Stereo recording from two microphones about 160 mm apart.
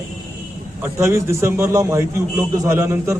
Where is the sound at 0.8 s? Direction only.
15° right (ahead or behind).